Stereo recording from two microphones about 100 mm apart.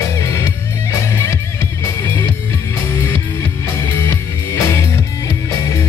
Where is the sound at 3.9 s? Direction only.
25° left (ahead or behind).